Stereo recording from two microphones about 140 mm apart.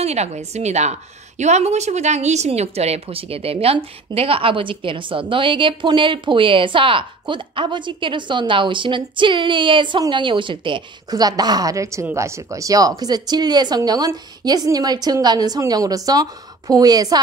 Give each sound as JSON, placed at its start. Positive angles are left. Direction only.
{"t": 0.0, "sound": "a woman's voice", "side_deg": -50}